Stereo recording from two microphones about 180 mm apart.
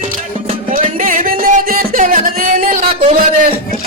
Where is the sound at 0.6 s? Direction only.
50° right (ahead or behind).